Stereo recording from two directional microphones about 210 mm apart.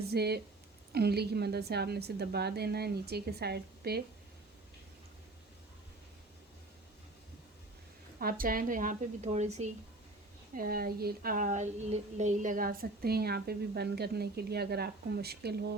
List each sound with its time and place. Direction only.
0.0 s speech: 50° right (ahead or behind)
8.2 s a woman's voice: 45° right (ahead or behind)
10.5 s speech: 45° right (ahead or behind)